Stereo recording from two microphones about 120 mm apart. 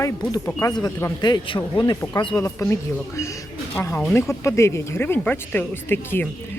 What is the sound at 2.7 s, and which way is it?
Speech, 25° left (ahead or behind).